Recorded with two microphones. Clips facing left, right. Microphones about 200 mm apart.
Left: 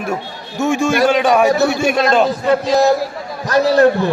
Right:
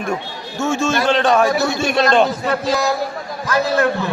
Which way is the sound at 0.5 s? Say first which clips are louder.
Left 3 dB; 15° left (ahead or behind).